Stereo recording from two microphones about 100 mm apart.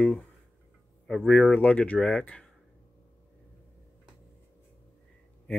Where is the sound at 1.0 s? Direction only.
5° left (ahead or behind).